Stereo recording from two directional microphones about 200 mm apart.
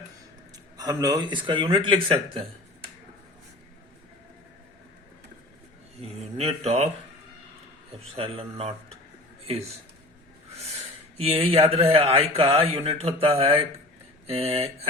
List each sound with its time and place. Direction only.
0.8 s speech: 20° right (ahead or behind)
6.0 s a sound: 30° right (ahead or behind)
8.0 s speech: 30° right (ahead or behind)
11.2 s speech: 30° right (ahead or behind)